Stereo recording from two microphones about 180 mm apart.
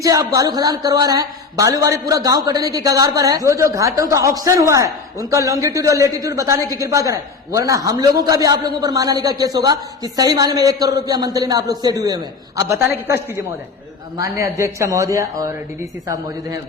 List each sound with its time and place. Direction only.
0.0 s a woman's voice: 20° right (ahead or behind)